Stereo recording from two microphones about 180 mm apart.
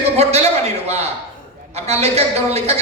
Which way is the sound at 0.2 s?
35° right (ahead or behind).